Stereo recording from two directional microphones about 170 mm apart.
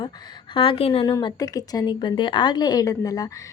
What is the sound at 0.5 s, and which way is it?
Speech, 30° left (ahead or behind).